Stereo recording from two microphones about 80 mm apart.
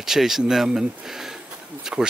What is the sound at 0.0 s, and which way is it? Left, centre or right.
Speech, centre.